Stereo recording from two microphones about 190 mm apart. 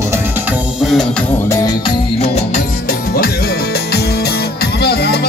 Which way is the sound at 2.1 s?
35° left (ahead or behind).